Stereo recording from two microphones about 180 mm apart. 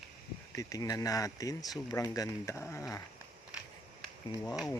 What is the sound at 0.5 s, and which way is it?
Speech, 20° left (ahead or behind).